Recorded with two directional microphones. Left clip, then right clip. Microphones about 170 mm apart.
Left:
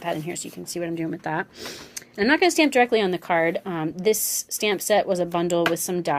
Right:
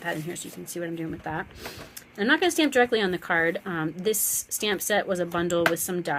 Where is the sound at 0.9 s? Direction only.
40° left (ahead or behind).